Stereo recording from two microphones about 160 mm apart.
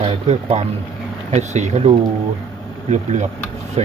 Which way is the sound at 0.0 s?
45° right (ahead or behind).